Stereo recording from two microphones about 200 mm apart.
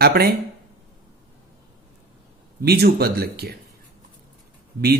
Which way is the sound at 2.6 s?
55° right (ahead or behind).